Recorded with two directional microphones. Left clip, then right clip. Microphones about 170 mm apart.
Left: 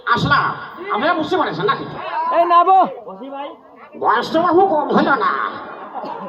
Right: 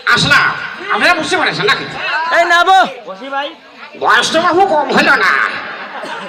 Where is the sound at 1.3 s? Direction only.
25° right (ahead or behind).